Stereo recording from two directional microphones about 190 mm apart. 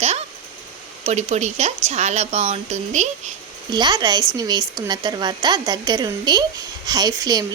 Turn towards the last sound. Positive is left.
turn(degrees=-20)  # may be behind; listen again after turning